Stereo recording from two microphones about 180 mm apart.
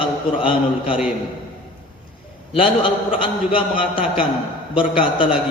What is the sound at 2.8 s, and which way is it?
A man's voice, 30° left (ahead or behind).